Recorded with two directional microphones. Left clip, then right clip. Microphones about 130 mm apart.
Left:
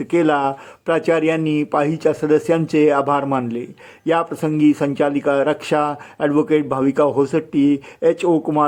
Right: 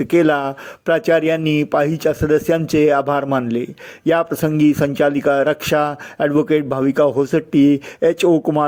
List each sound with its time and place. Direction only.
0.0 s speech: 20° right (ahead or behind)